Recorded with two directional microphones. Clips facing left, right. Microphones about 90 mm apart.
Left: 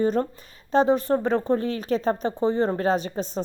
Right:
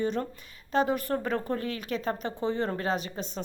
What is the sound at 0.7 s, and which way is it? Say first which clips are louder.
Speech: left 7 dB; 30° left (ahead or behind).